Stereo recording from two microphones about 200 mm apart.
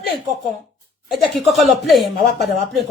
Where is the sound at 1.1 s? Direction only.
Centre (ahead or behind).